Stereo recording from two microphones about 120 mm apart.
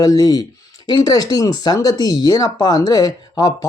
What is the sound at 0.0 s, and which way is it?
Speech, 30° left (ahead or behind).